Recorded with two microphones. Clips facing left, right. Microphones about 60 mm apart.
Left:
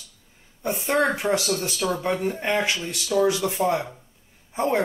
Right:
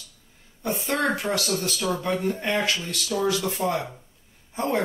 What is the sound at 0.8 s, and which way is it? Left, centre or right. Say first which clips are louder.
Speech: left 4 dB; centre.